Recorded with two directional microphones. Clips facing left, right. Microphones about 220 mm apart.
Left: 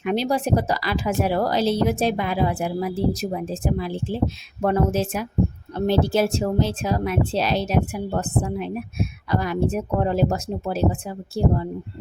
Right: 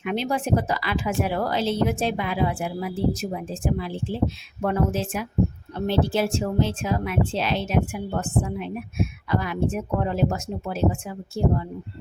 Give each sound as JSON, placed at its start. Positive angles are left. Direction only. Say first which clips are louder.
{"t": 0.0, "sound": "speech", "louder": "left 3 dB", "side_deg": 35}